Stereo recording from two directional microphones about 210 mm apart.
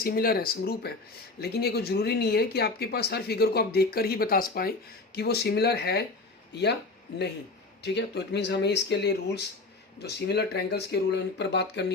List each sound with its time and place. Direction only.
0.0 s speech: 45° left (ahead or behind)
7.8 s speech: 55° left (ahead or behind)